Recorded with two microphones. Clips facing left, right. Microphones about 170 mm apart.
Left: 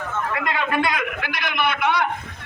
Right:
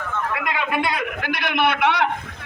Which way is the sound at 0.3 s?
15° right (ahead or behind).